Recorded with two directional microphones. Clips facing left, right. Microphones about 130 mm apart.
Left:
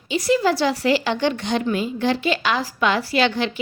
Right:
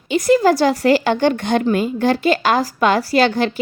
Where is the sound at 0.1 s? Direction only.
50° right (ahead or behind).